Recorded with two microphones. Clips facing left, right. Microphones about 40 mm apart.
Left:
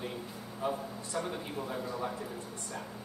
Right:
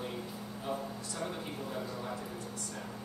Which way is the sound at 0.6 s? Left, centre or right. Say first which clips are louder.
Left 3 dB; centre.